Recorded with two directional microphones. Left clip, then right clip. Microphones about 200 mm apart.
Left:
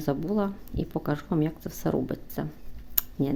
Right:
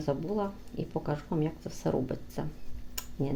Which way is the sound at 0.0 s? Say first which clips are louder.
Left 3 dB; 30° left (ahead or behind).